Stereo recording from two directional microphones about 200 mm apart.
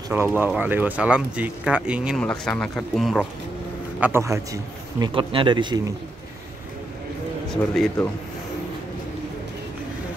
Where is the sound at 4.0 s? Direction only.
15° right (ahead or behind).